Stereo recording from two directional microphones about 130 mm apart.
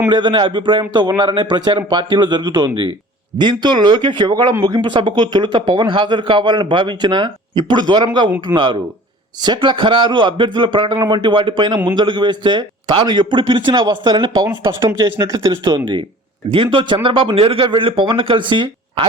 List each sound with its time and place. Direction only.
0.1 s speech: 35° right (ahead or behind)